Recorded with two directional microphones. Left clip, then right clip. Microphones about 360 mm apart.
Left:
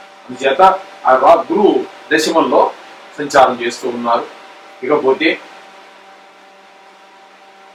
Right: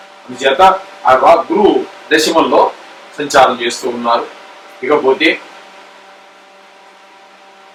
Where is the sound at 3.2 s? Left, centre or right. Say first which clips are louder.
Right 1 dB; centre.